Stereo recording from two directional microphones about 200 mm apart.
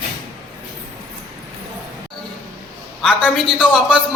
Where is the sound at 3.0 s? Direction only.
Centre (ahead or behind).